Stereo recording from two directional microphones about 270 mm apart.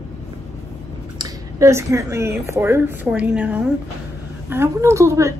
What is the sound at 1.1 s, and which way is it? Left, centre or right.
A woman's voice, centre.